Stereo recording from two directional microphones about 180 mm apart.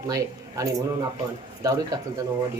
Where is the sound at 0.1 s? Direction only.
20° right (ahead or behind).